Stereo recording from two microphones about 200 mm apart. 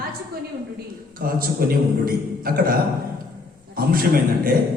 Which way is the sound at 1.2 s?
45° right (ahead or behind).